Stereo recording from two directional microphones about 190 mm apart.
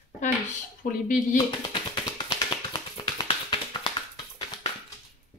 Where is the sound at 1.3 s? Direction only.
25° left (ahead or behind).